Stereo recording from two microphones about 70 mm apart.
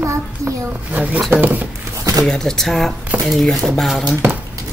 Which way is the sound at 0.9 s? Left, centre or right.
Right.